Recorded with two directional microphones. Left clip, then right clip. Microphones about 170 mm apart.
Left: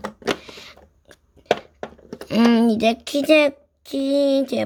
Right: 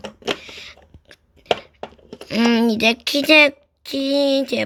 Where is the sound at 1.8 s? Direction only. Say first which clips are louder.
Left 1 dB; 40° left (ahead or behind).